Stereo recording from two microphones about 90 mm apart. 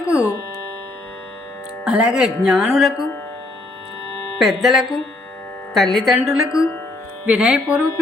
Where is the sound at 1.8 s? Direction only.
10° right (ahead or behind).